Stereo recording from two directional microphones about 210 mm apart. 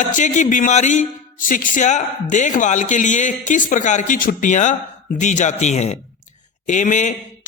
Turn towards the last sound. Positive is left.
turn(degrees=35)  # may be behind; listen again after turning